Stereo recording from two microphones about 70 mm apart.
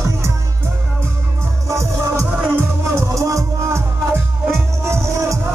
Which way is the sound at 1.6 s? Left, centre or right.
Right.